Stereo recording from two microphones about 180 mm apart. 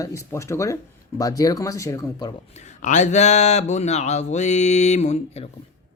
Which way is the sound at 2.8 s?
45° left (ahead or behind).